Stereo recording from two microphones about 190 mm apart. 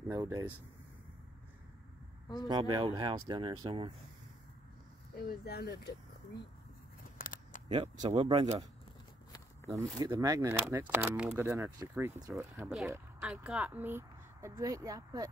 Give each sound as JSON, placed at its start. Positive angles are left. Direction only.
{"t": 0.1, "sound": "speech", "side_deg": -20}
{"t": 2.4, "sound": "speech", "side_deg": -20}
{"t": 5.2, "sound": "speech", "side_deg": 55}
{"t": 7.2, "sound": "single-lens reflex camera", "side_deg": 45}
{"t": 7.6, "sound": "speech", "side_deg": -30}
{"t": 9.9, "sound": "speech", "side_deg": -20}
{"t": 11.0, "sound": "speech", "side_deg": -5}